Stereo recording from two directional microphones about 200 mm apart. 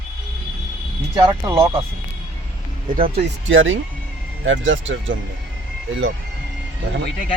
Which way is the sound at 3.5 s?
75° right (ahead or behind).